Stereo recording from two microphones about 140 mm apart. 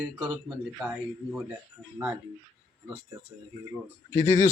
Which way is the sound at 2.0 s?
15° right (ahead or behind).